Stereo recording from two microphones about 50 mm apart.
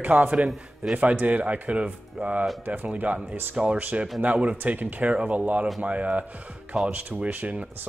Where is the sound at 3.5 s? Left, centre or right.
Right.